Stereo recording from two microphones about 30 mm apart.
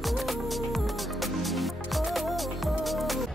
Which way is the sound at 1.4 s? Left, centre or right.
Centre.